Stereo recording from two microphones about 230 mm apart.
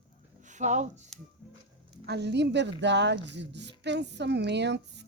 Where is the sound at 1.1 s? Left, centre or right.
Centre.